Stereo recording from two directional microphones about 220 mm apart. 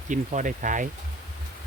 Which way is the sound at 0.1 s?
35° right (ahead or behind).